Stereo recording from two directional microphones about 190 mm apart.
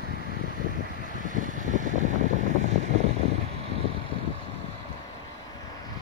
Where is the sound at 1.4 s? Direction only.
40° right (ahead or behind).